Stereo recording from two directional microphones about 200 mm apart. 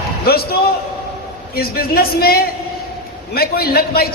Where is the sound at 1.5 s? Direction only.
50° left (ahead or behind).